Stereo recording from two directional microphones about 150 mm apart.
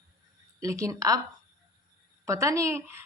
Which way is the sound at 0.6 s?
20° right (ahead or behind).